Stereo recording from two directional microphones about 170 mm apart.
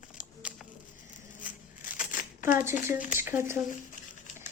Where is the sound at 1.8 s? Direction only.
50° left (ahead or behind).